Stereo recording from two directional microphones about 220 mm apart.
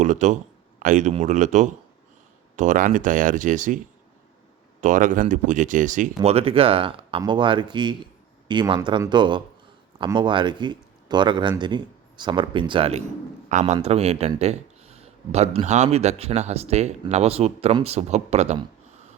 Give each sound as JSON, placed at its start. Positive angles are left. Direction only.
{"t": 0.0, "sound": "a man's voice", "side_deg": -35}
{"t": 4.8, "sound": "speech", "side_deg": -35}
{"t": 13.5, "sound": "speech", "side_deg": -35}